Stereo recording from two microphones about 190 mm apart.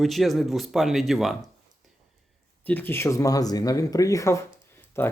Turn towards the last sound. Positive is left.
turn(degrees=15)  # may be behind; listen again after turning